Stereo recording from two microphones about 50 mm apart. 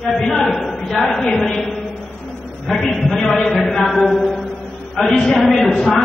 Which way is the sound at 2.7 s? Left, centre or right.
Centre.